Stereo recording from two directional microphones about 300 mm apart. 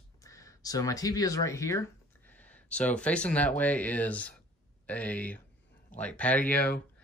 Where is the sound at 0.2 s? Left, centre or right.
Centre.